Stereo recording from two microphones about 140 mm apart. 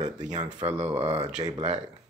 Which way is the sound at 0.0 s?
60° right (ahead or behind).